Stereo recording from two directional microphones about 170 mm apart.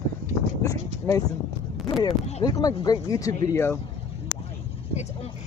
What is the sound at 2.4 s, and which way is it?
Speech, 20° left (ahead or behind).